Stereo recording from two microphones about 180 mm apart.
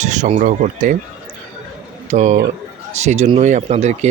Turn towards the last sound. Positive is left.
turn(degrees=-40)  # may be behind; listen again after turning